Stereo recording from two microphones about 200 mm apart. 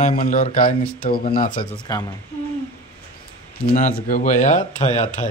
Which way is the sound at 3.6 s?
40° left (ahead or behind).